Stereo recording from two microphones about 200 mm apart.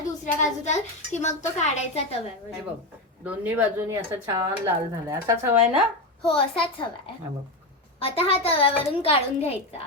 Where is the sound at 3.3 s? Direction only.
10° right (ahead or behind).